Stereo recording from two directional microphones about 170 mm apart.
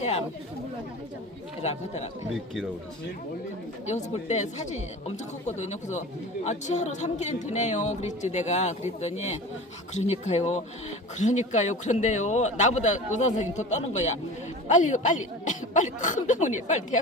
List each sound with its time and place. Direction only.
0.0 s speech: 40° left (ahead or behind)
3.8 s a woman's voice: 40° left (ahead or behind)